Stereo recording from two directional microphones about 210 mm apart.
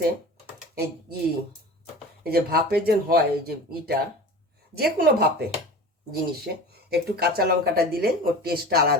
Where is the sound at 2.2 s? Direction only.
45° right (ahead or behind).